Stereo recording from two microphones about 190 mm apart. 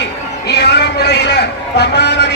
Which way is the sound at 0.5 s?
60° left (ahead or behind).